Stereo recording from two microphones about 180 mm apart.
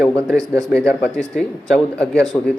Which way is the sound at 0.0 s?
10° left (ahead or behind).